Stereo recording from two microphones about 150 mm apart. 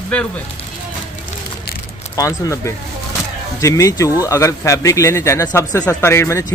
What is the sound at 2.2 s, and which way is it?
Speech, 20° left (ahead or behind).